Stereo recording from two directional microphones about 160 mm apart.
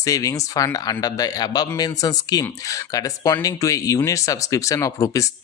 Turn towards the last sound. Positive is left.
turn(degrees=20)  # may be behind; listen again after turning